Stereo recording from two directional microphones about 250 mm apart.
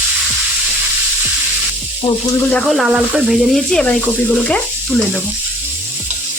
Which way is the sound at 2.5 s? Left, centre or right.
Centre.